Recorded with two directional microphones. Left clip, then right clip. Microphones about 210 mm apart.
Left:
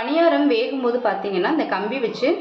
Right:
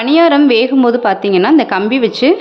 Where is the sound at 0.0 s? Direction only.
55° right (ahead or behind).